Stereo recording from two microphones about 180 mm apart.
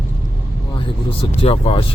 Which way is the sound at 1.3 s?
35° left (ahead or behind).